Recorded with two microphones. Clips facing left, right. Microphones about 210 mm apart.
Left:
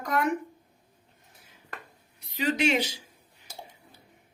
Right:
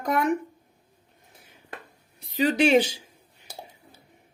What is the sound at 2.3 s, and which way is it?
Speech, 35° right (ahead or behind).